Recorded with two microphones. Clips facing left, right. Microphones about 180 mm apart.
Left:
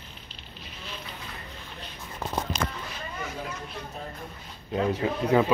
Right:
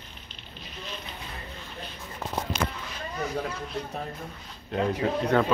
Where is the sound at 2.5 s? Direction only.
40° left (ahead or behind).